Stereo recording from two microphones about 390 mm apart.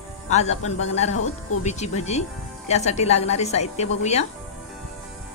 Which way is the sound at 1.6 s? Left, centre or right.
Centre.